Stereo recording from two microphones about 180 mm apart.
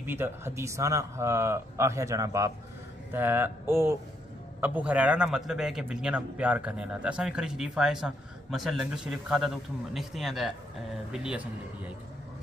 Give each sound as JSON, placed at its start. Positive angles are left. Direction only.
{"t": 0.0, "sound": "a man's voice", "side_deg": -10}